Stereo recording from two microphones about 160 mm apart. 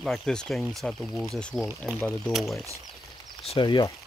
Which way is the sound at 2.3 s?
Centre (ahead or behind).